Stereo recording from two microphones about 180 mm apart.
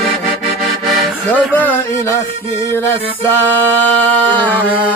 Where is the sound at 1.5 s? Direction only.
10° left (ahead or behind).